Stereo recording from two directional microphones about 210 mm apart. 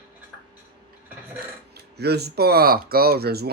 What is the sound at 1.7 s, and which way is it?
Speech, 50° right (ahead or behind).